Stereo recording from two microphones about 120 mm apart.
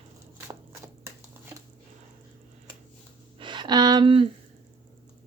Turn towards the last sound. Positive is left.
turn(degrees=-35)  # may be behind; listen again after turning